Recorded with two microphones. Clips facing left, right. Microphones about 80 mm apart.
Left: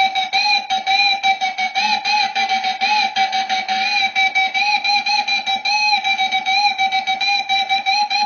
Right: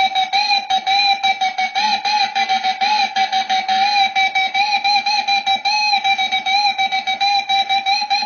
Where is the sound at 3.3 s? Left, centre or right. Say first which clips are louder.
Right 3 dB; right.